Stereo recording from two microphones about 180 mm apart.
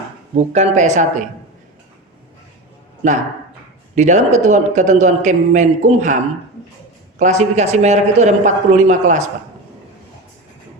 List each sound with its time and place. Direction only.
0.3 s a man's voice: 40° right (ahead or behind)
3.9 s a man's voice: 40° right (ahead or behind)
7.2 s a man's voice: 40° right (ahead or behind)